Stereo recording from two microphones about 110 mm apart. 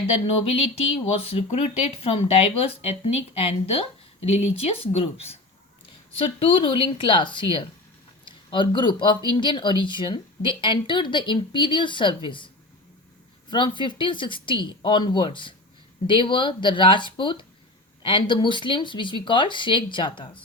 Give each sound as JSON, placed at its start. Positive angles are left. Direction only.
{"t": 0.3, "sound": "speech", "side_deg": 65}
{"t": 13.5, "sound": "speech", "side_deg": 45}